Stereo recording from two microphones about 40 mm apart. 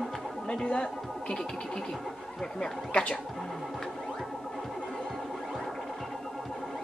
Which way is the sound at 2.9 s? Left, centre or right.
Left.